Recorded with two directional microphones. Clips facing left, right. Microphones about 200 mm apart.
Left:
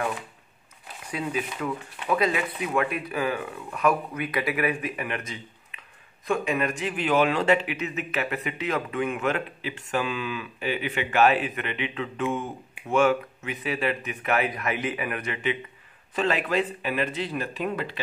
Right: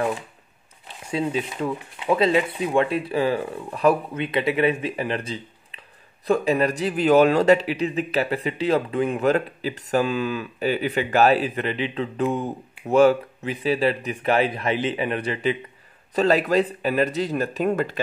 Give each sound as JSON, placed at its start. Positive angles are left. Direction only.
{"t": 0.8, "sound": "a man's voice", "side_deg": -25}